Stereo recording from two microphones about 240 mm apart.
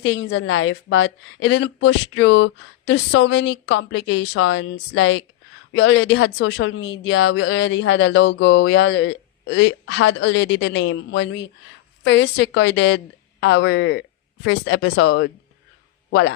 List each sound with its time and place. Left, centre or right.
0.0 s speech: left
4.2 s speech: left
4.5 s speech: left